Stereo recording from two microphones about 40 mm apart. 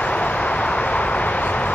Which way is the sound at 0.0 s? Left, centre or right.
Left.